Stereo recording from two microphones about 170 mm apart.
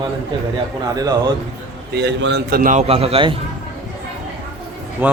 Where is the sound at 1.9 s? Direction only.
85° right.